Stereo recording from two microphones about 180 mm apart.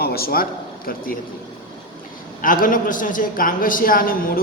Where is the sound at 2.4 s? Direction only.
50° left (ahead or behind).